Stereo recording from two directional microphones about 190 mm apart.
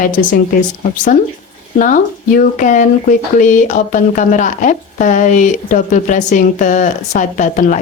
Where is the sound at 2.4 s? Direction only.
45° left (ahead or behind).